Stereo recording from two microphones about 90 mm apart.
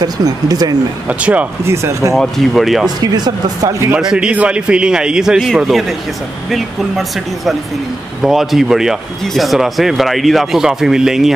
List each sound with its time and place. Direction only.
0.0 s speech: 45° right (ahead or behind)
1.0 s a man's voice: 15° right (ahead or behind)
1.7 s speech: 30° right (ahead or behind)
2.1 s speech: centre (ahead or behind)
3.0 s speech: 45° right (ahead or behind)
4.0 s a man's voice: 10° right (ahead or behind)